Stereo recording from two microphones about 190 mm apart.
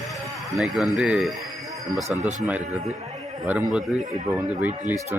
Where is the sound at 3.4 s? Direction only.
5° right (ahead or behind).